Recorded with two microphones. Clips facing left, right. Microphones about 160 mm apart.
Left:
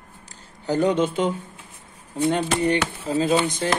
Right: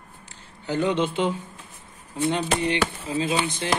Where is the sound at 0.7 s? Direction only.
40° left (ahead or behind).